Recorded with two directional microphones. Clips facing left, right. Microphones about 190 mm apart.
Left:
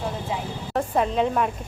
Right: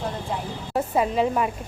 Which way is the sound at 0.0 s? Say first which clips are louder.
Even; centre (ahead or behind).